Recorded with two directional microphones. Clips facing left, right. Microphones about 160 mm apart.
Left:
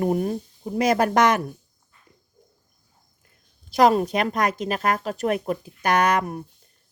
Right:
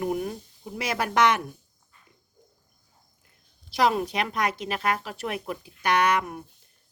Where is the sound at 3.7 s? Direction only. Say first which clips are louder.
Left 6 dB; 45° left (ahead or behind).